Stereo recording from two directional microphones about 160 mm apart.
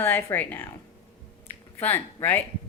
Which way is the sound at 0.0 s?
15° left (ahead or behind).